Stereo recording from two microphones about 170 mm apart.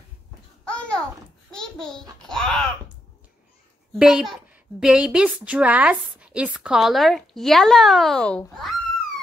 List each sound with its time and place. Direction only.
0.7 s a sound: 5° left (ahead or behind)
1.5 s a child's voice: 5° left (ahead or behind)
4.0 s a child's voice: centre (ahead or behind)